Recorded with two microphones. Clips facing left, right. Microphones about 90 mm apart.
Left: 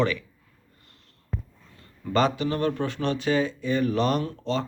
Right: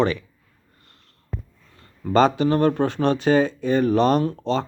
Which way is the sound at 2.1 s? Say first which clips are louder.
Right 6 dB; 35° right (ahead or behind).